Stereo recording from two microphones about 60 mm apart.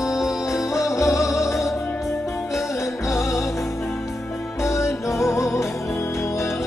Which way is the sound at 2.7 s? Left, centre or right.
Left.